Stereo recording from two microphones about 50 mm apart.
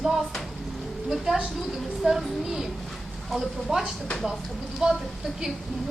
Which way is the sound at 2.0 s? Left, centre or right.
Centre.